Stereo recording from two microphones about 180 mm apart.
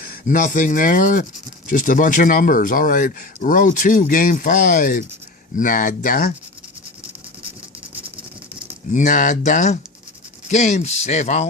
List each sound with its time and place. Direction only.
0.0 s speech: 50° left (ahead or behind)
8.9 s speech: 45° left (ahead or behind)